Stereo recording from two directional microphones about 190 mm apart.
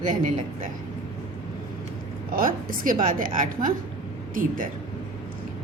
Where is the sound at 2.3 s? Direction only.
50° right (ahead or behind).